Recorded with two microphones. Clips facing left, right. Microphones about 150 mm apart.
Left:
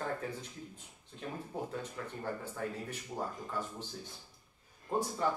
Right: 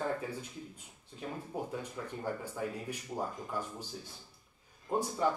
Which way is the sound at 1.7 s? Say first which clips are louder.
Right 1 dB; 10° right (ahead or behind).